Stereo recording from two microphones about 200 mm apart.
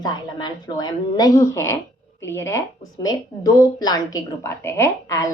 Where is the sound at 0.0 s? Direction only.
20° left (ahead or behind).